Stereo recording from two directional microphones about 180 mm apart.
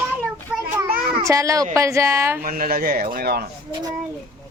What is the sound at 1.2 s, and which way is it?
Speech, 20° right (ahead or behind).